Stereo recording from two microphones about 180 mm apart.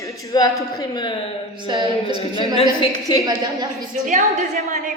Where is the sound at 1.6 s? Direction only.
25° right (ahead or behind).